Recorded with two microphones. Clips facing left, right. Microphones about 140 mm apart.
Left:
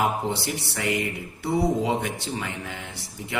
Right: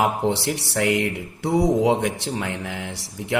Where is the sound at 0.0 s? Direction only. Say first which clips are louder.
Right 4 dB; 75° right (ahead or behind).